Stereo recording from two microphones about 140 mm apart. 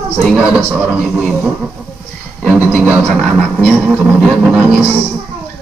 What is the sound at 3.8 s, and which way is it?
Speech, 5° right (ahead or behind).